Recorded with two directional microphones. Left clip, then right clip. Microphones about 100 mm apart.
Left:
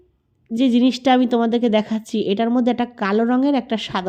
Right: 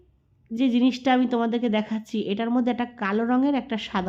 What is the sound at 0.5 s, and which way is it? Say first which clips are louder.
A woman's voice: left 5 dB; 40° left (ahead or behind).